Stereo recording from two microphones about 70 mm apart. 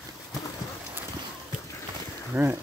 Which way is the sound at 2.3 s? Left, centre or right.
Right.